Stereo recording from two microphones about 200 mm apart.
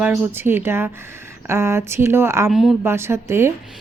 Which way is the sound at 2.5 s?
Centre (ahead or behind).